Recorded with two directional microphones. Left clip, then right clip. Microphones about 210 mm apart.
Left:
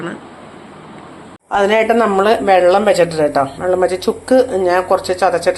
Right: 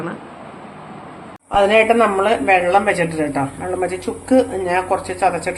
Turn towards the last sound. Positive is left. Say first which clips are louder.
# left 5 dB
turn(degrees=15)  # may be behind; listen again after turning